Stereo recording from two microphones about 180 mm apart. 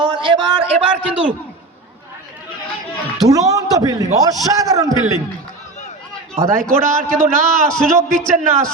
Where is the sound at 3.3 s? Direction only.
20° right (ahead or behind).